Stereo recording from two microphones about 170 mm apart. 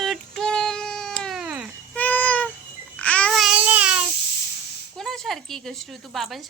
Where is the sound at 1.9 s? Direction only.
10° left (ahead or behind).